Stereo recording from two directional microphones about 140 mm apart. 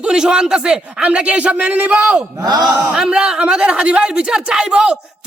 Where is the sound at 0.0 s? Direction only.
5° right (ahead or behind).